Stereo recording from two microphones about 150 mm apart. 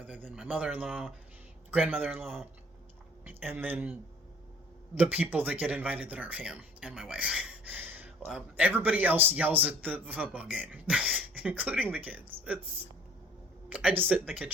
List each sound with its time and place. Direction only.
0.2 s speech: 10° right (ahead or behind)
2.2 s speech: centre (ahead or behind)
3.2 s speech: 10° right (ahead or behind)
4.9 s speech: 10° right (ahead or behind)
13.7 s speech: 10° right (ahead or behind)